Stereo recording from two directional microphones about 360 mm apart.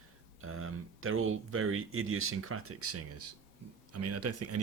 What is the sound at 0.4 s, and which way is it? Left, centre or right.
Speech, right.